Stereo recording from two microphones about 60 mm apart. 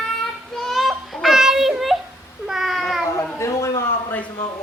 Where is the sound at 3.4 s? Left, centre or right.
Left.